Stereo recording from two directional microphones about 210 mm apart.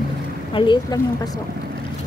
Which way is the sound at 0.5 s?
20° left (ahead or behind).